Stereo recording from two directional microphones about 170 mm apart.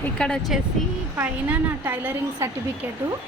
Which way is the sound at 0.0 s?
5° left (ahead or behind).